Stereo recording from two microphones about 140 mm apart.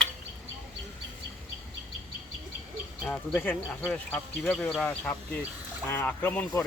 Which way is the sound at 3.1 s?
10° left (ahead or behind).